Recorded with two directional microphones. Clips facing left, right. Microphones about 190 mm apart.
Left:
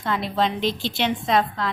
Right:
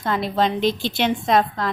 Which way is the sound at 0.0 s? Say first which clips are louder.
Right 2 dB; 45° right (ahead or behind).